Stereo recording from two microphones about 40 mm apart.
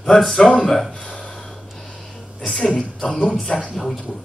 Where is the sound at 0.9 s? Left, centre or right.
Left.